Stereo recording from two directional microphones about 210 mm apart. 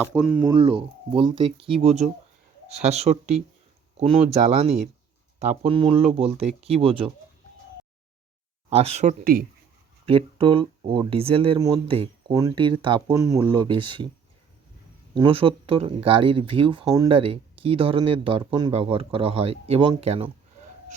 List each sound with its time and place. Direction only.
0.1 s speech: 5° right (ahead or behind)
0.5 s speech: 25° right (ahead or behind)
8.7 s speech: 30° right (ahead or behind)
15.1 s speech: 25° right (ahead or behind)